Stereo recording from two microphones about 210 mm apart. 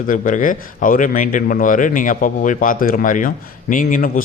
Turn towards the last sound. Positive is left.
turn(degrees=40)  # may be behind; listen again after turning